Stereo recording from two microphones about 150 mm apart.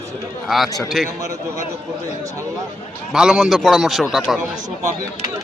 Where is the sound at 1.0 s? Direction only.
Centre (ahead or behind).